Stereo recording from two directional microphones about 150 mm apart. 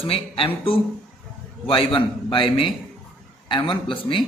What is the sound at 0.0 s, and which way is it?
A man's voice, 40° left (ahead or behind).